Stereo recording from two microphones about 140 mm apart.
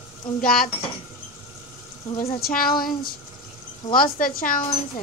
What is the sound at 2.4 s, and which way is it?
A woman's voice, 90° left.